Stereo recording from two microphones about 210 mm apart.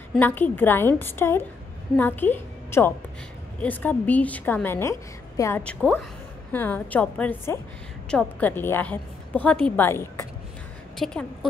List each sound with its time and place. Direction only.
0.1 s a woman's voice: 10° left (ahead or behind)